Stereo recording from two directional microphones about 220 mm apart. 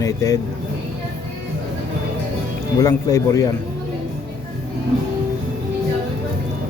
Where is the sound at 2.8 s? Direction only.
15° left (ahead or behind).